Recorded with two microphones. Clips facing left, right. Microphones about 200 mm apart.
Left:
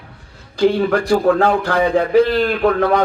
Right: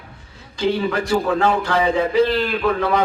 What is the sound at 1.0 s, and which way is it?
A man's voice, 60° left (ahead or behind).